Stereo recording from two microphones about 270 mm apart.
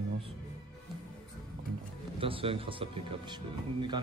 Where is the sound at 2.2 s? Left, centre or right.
Centre.